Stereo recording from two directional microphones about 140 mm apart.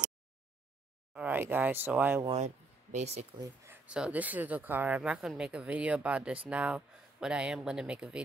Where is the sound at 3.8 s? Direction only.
5° right (ahead or behind).